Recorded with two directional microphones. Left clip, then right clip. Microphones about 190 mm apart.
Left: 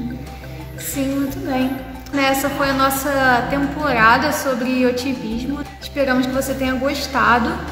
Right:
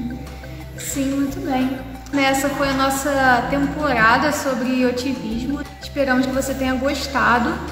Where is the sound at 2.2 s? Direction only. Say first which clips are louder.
Left 1 dB; 15° left (ahead or behind).